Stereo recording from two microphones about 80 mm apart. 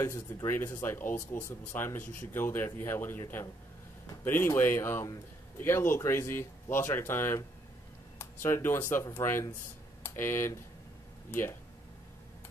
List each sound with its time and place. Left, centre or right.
0.0 s speech: left